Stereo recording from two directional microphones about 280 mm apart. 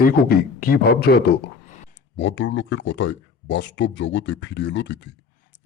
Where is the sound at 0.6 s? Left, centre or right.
Left.